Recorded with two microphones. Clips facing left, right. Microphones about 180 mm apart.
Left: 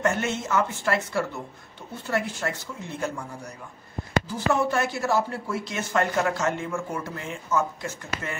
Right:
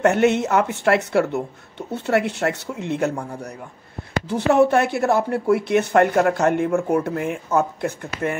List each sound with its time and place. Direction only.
0.0 s a woman's voice: 65° right (ahead or behind)
4.3 s speech: 65° right (ahead or behind)